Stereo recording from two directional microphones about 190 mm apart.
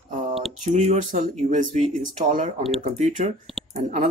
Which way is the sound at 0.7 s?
35° right (ahead or behind).